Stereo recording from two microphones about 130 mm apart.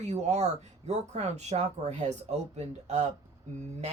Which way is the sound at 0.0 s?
60° right (ahead or behind).